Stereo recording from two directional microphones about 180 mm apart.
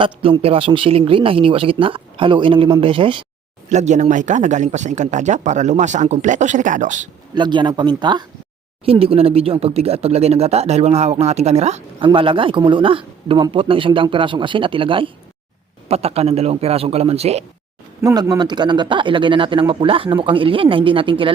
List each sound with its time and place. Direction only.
0.0 s speech: 30° right (ahead or behind)
3.7 s speech: 40° right (ahead or behind)
7.3 s speech: 25° right (ahead or behind)
18.0 s speech: 20° right (ahead or behind)